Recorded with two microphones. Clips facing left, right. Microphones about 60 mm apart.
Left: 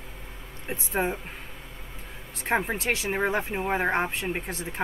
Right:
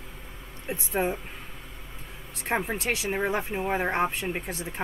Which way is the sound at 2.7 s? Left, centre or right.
Centre.